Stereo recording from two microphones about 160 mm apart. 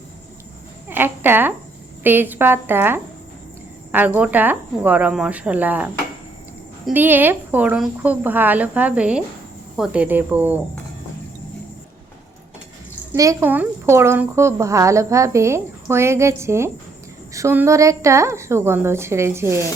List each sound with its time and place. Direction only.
0.9 s a woman's voice: 15° right (ahead or behind)
6.9 s a woman's voice: 10° right (ahead or behind)
13.1 s a woman's voice: 15° right (ahead or behind)